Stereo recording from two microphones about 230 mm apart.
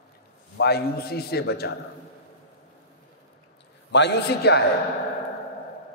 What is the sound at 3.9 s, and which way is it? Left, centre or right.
Speech, left.